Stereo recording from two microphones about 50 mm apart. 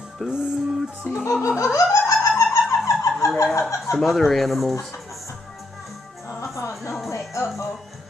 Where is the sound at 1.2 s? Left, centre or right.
Left.